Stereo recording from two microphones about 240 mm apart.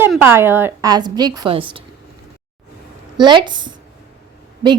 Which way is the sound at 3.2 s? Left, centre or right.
Centre.